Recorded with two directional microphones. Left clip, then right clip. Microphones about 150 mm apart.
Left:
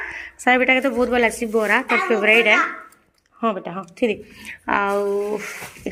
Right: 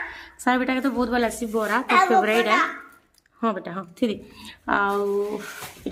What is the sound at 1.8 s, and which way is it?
Speech, 60° right (ahead or behind).